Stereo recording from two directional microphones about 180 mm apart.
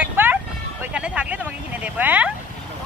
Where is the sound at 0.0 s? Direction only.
10° right (ahead or behind).